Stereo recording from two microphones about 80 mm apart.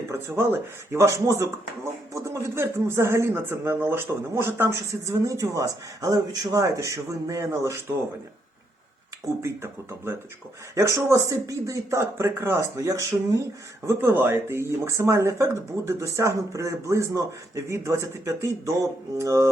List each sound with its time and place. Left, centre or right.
0.1 s speech: right
9.4 s speech: right
13.8 s speech: right